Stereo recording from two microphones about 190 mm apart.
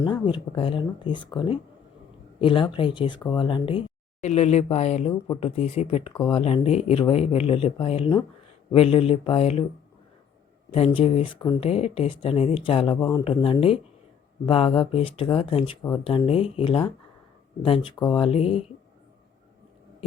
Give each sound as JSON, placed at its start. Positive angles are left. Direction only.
{"t": 0.0, "sound": "speech", "side_deg": 25}
{"t": 10.7, "sound": "speech", "side_deg": 30}